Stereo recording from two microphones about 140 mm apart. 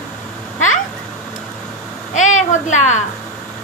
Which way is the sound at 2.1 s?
60° left (ahead or behind).